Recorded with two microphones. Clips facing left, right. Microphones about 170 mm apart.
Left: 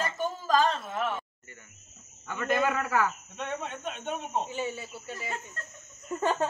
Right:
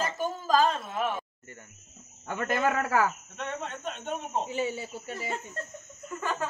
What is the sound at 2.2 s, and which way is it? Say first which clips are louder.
Speech: even; 45° right (ahead or behind).